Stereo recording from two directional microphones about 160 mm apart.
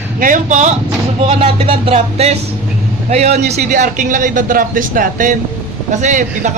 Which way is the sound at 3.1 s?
40° right (ahead or behind).